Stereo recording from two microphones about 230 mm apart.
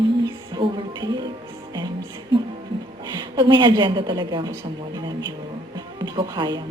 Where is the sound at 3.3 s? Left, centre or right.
Centre.